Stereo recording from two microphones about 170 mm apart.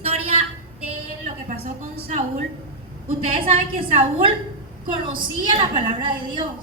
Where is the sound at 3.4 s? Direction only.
30° right (ahead or behind).